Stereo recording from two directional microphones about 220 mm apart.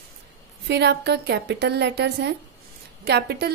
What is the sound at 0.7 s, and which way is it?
A woman's voice, 50° right (ahead or behind).